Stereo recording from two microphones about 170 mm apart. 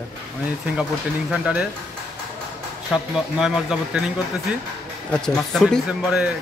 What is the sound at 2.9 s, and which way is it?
Speech, 5° right (ahead or behind).